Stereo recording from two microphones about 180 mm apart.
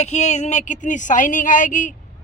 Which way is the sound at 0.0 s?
40° left (ahead or behind).